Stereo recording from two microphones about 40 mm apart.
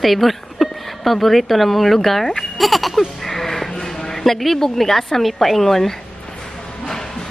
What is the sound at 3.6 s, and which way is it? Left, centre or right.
A woman's voice, centre.